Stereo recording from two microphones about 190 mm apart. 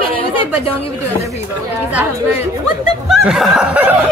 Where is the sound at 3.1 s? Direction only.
Centre (ahead or behind).